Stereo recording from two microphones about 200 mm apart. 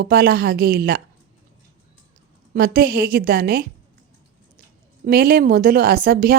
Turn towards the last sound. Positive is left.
turn(degrees=-50)  # may be behind; listen again after turning